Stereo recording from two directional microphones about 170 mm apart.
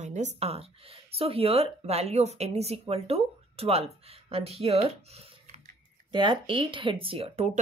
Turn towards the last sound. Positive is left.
turn(degrees=-35)  # may be behind; listen again after turning